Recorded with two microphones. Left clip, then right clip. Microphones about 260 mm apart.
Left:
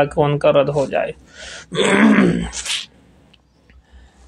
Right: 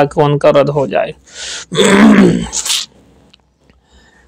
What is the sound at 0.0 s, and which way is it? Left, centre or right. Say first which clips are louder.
Speech: right 5 dB; right.